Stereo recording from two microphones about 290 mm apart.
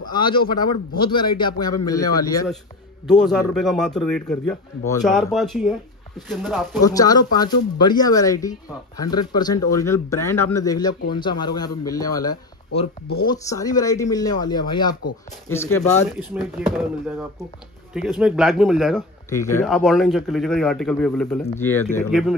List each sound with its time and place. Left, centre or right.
0.0 s speech: centre
3.1 s speech: centre
6.8 s speech: centre
16.2 s speech: centre
17.9 s speech: centre